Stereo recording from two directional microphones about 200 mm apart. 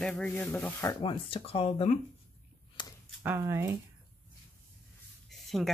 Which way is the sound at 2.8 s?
25° left (ahead or behind).